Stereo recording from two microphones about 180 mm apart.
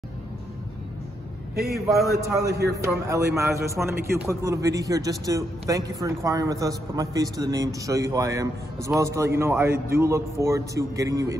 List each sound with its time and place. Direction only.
2.1 s a man's voice: 15° right (ahead or behind)